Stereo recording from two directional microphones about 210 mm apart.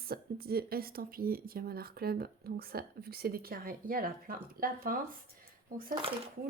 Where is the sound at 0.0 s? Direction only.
45° right (ahead or behind).